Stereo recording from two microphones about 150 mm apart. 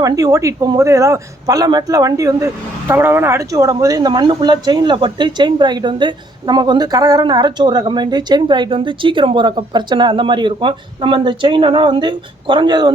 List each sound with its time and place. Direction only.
0.0 s a man's voice: 20° right (ahead or behind)